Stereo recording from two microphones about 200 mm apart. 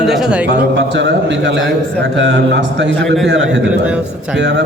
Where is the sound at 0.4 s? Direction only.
55° right (ahead or behind).